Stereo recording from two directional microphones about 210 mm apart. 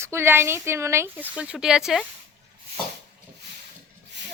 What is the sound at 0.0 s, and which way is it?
Speech, 10° right (ahead or behind).